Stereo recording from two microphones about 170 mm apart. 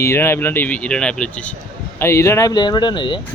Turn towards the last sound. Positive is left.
turn(degrees=30)  # may be behind; listen again after turning